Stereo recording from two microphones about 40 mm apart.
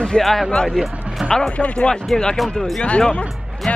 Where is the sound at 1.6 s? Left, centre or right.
Left.